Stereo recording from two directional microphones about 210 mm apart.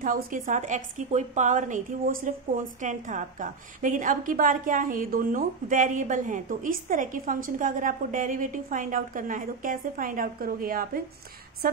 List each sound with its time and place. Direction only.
0.0 s a woman's voice: 40° right (ahead or behind)